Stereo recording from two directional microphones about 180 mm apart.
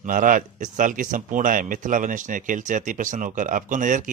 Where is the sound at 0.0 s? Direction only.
50° right (ahead or behind).